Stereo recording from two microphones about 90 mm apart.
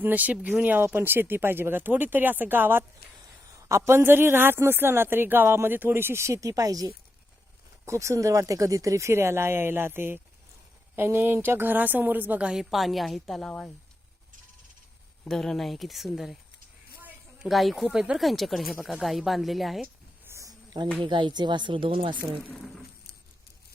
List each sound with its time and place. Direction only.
0.0 s a woman's voice: 20° right (ahead or behind); by 13.5 s centre (ahead or behind)
15.2 s speech: 5° left (ahead or behind)
17.5 s speech: centre (ahead or behind)
18.2 s speech: centre (ahead or behind)
20.2 s a sound: 30° right (ahead or behind)
21.0 s speech: 65° right (ahead or behind)
22.5 s speech: 5° left (ahead or behind)